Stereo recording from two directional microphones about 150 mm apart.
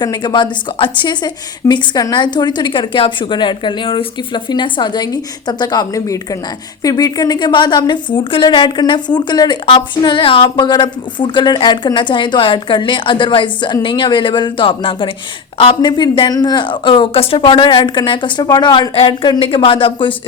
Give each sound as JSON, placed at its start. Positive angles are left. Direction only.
{"t": 0.0, "sound": "a woman's voice", "side_deg": 30}